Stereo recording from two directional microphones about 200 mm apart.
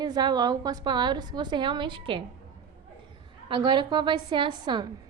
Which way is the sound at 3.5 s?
20° right (ahead or behind).